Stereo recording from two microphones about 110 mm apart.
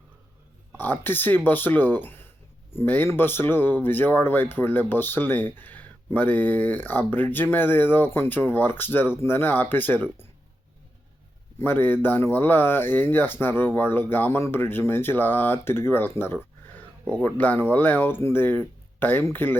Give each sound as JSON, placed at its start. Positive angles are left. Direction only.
{"t": 0.8, "sound": "speech", "side_deg": 15}
{"t": 11.6, "sound": "speech", "side_deg": 20}